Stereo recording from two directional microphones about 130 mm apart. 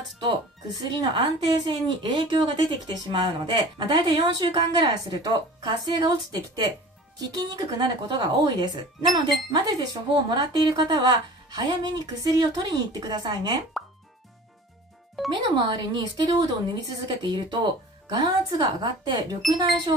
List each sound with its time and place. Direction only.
0.3 s a woman's voice: 35° right (ahead or behind)
15.2 s a child's voice: centre (ahead or behind)
15.7 s a woman's voice: 35° right (ahead or behind)
19.4 s a child's voice: centre (ahead or behind)